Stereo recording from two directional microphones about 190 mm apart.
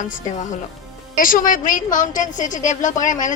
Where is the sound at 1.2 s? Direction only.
45° left (ahead or behind).